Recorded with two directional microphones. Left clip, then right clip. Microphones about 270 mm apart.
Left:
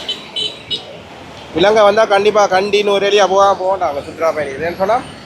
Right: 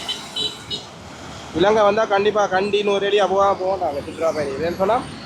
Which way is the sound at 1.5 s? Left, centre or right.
Centre.